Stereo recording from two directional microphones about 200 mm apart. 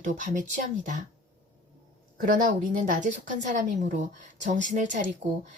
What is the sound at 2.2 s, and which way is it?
A woman's voice, 40° right (ahead or behind).